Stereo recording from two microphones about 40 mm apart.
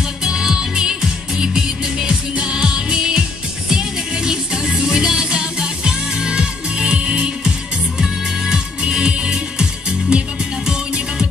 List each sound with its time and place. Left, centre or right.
0.2 s music: centre
8.8 s music: right